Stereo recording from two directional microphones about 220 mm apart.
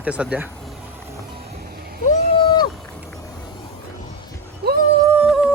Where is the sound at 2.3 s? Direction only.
20° left (ahead or behind).